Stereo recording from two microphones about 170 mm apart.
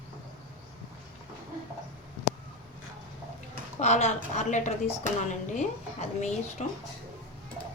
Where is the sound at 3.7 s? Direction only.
40° left (ahead or behind).